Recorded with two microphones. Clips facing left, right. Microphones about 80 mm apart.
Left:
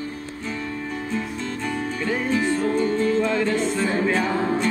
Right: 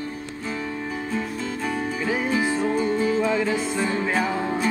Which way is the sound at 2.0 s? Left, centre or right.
Centre.